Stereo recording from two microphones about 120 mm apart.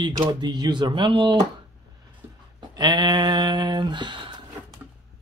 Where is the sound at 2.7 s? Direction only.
35° right (ahead or behind).